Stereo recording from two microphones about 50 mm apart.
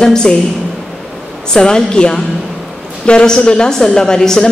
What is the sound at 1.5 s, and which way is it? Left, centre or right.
A woman's voice, centre.